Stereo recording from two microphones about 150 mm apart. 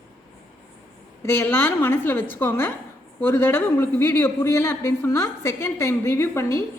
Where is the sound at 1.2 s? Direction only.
15° left (ahead or behind).